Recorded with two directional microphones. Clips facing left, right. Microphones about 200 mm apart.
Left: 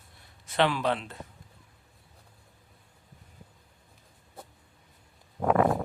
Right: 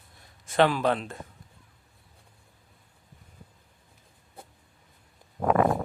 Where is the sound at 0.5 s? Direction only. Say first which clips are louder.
Right 3 dB; 45° right (ahead or behind).